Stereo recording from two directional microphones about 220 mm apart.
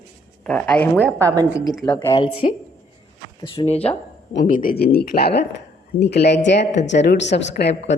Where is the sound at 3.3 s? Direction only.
25° left (ahead or behind).